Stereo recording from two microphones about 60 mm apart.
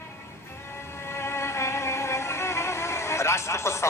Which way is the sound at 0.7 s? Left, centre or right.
Left.